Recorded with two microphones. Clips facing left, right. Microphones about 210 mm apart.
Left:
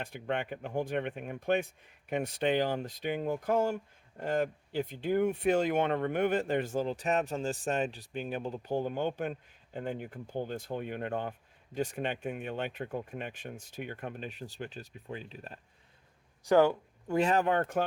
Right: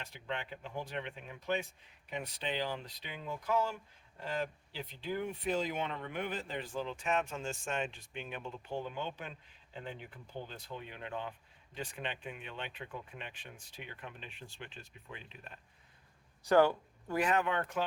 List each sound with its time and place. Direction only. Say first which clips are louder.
0.0 s speech: left 7 dB; 55° left (ahead or behind); by 15.6 s 40° left (ahead or behind)
16.4 s speech: left 3 dB; 15° left (ahead or behind)
17.4 s speech: left 6 dB; 45° left (ahead or behind)